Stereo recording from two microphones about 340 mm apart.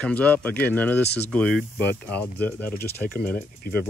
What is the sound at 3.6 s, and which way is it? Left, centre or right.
Speech, left.